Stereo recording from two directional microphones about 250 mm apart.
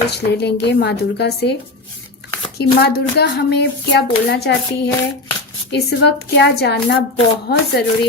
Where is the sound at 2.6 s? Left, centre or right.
Left.